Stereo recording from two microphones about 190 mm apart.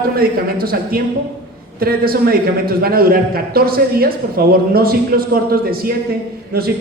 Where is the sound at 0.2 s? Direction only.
50° right (ahead or behind).